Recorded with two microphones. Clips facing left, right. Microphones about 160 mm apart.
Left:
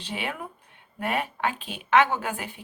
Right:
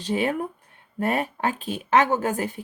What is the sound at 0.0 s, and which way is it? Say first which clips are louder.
Speech: right 9 dB; 40° right (ahead or behind).